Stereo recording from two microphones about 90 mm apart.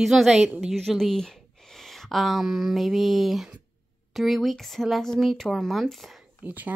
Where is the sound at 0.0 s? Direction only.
5° right (ahead or behind).